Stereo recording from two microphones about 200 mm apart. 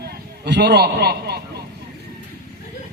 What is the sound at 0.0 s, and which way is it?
A man's voice, 55° right (ahead or behind).